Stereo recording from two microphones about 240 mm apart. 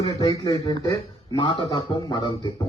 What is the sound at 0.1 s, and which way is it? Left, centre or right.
A man's voice, centre.